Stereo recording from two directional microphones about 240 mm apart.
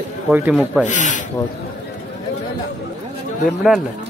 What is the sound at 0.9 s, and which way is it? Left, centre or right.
Rub, left.